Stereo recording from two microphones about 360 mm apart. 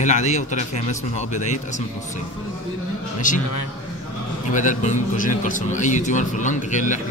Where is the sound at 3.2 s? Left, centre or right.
Left.